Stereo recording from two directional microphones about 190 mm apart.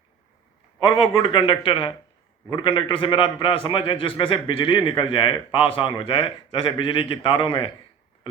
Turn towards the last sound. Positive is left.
turn(degrees=25)  # may be behind; listen again after turning